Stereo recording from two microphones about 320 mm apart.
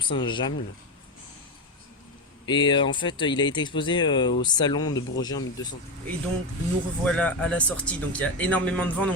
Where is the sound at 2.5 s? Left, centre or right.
Centre.